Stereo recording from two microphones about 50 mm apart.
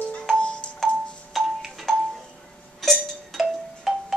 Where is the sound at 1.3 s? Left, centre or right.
Centre.